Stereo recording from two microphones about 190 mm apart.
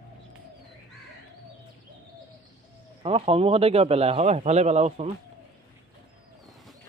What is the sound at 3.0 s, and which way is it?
A man's voice, 30° right (ahead or behind).